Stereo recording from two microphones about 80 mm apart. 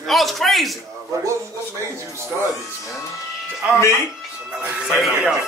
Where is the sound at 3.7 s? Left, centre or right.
Left.